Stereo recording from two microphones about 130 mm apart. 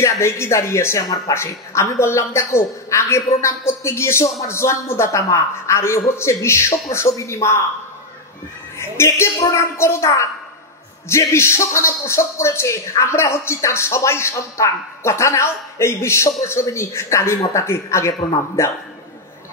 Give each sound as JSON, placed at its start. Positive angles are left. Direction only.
{"t": 0.0, "sound": "speech", "side_deg": 20}
{"t": 8.7, "sound": "speech", "side_deg": 20}